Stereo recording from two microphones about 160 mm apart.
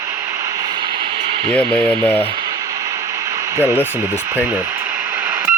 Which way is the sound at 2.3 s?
30° right (ahead or behind).